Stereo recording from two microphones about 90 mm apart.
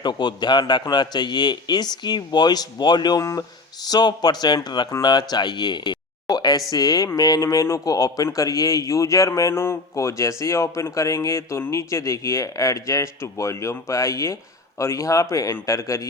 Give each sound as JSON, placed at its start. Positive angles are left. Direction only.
{"t": 0.0, "sound": "a man's voice", "side_deg": 55}
{"t": 3.2, "sound": "a man's voice", "side_deg": 35}
{"t": 3.8, "sound": "a man's voice", "side_deg": 50}